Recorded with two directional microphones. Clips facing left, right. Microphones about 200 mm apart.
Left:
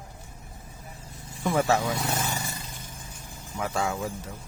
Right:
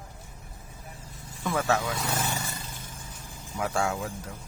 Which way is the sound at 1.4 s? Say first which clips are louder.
Left 3 dB; 15° left (ahead or behind).